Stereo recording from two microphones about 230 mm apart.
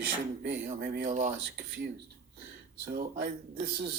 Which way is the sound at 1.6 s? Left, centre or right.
Right.